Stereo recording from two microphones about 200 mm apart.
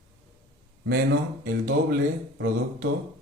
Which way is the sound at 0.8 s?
50° right (ahead or behind).